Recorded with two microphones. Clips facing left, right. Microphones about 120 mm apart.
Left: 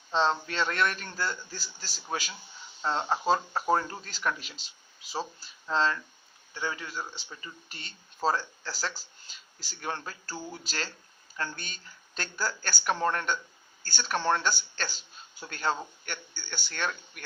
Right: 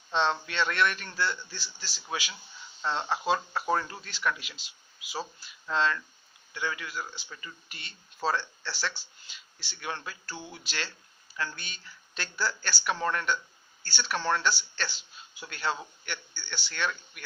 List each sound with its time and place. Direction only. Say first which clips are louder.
0.1 s speech: left 1 dB; 35° left (ahead or behind)
2.8 s speech: left 2 dB; 30° left (ahead or behind)
14.2 s speech: left 2 dB; 20° left (ahead or behind)
14.4 s speech: right 1 dB; 45° left (ahead or behind)